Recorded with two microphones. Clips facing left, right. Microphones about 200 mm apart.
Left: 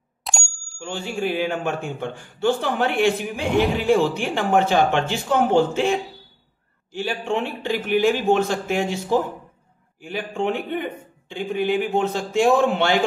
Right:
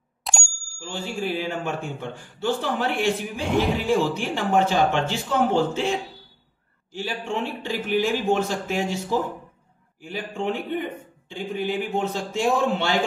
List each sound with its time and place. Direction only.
0.2 s bicycle bell: centre (ahead or behind)
0.7 s a man's voice: 65° left (ahead or behind)
3.4 s speech: centre (ahead or behind)
3.9 s a man's voice: 60° left (ahead or behind)
7.0 s a man's voice: 60° left (ahead or behind)